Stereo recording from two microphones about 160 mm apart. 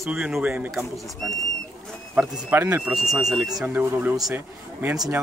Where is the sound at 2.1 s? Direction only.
10° right (ahead or behind).